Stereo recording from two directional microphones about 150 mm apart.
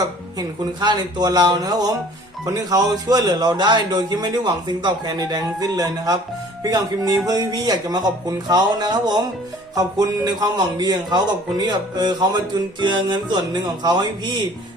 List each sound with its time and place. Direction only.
0.3 s a man's voice: 30° right (ahead or behind)